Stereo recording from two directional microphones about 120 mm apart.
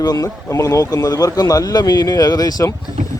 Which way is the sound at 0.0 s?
30° left (ahead or behind).